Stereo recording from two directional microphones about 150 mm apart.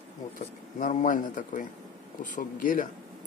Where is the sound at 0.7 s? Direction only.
60° left (ahead or behind).